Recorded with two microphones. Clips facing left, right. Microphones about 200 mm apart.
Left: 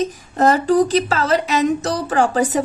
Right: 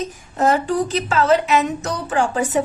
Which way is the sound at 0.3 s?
40° left (ahead or behind).